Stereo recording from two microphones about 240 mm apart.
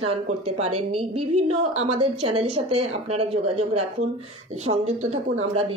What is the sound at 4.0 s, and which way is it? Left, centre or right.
Speech, right.